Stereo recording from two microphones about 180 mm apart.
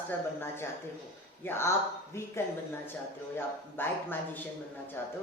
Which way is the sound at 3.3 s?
10° left (ahead or behind).